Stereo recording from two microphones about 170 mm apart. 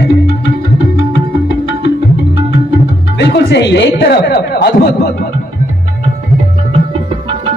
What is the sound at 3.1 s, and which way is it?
Speech, 90° left.